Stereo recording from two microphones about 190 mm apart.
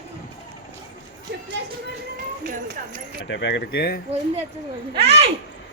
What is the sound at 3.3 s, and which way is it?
Speech, 70° left (ahead or behind).